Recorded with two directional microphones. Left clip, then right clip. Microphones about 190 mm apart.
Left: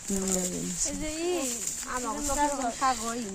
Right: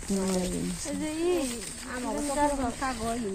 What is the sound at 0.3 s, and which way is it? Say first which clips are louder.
Speech: even; 45° left (ahead or behind).